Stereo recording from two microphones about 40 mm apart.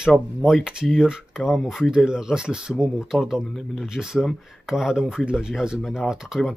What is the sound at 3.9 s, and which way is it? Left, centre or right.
Speech, centre.